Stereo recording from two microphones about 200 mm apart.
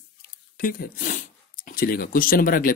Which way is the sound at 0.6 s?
45° left (ahead or behind).